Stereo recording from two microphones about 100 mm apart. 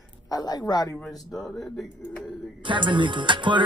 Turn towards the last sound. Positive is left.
turn(degrees=-55)  # may be behind; listen again after turning